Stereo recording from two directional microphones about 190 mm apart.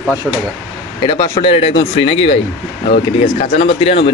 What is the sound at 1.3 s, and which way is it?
Speech, 30° left (ahead or behind).